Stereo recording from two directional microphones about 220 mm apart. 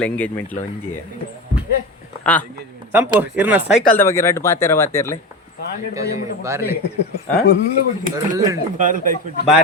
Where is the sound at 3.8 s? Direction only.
10° left (ahead or behind).